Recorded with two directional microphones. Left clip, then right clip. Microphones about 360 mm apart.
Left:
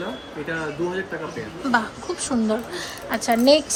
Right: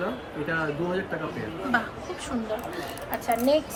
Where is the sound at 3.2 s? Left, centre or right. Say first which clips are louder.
Left 6 dB; left.